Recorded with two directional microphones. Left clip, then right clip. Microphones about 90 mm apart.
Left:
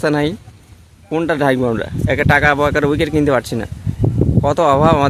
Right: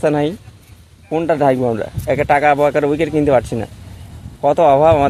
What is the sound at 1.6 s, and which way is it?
Speech, 40° left (ahead or behind).